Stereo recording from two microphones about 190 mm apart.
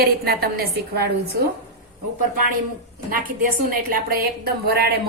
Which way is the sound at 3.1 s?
45° right (ahead or behind).